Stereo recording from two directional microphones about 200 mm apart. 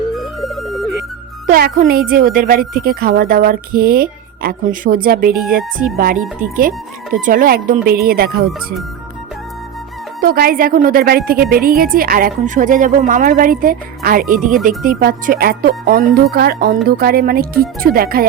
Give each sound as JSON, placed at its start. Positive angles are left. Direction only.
{"t": 0.2, "sound": "music", "side_deg": 0}
{"t": 1.5, "sound": "speech", "side_deg": -45}
{"t": 10.2, "sound": "speech", "side_deg": -45}